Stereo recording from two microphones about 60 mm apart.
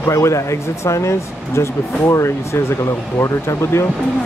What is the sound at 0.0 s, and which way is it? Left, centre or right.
Speech, left.